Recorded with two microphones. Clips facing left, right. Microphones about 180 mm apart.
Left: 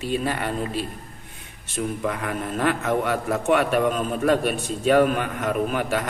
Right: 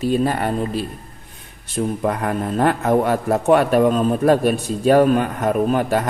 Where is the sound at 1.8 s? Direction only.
40° right (ahead or behind).